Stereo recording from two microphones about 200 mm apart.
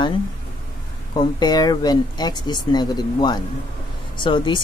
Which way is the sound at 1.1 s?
20° left (ahead or behind).